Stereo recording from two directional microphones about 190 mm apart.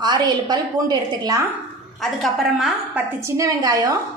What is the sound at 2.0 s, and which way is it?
A woman's voice, centre (ahead or behind).